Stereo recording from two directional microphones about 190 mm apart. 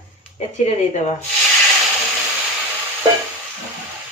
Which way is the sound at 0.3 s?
35° left (ahead or behind).